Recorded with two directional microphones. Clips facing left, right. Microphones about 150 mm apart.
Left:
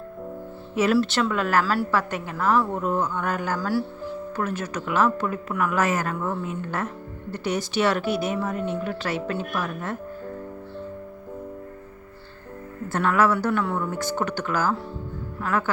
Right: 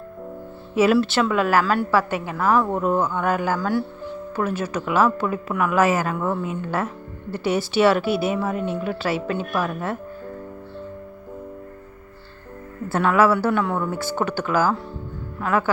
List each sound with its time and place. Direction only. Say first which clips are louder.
0.8 s speech: right 3 dB; 5° right (ahead or behind)
5.2 s a woman's voice: right 3 dB; 90° right
5.7 s speech: right 6 dB; 5° right (ahead or behind)
6.2 s a woman's voice: right 4 dB; 90° right
6.7 s speech: right 4 dB; 5° right (ahead or behind)
12.9 s speech: right 3 dB; 5° right (ahead or behind)